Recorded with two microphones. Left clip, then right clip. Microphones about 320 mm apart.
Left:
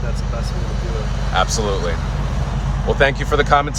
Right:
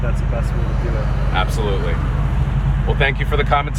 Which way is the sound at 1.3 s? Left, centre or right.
Centre.